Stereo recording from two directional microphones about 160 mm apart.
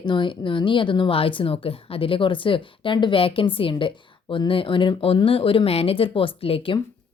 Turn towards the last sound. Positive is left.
turn(degrees=35)  # may be behind; listen again after turning